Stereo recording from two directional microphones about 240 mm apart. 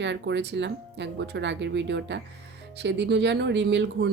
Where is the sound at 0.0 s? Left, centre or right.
Right.